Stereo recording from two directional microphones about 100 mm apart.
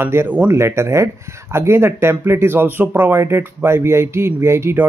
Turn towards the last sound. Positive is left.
turn(degrees=-25)  # may be behind; listen again after turning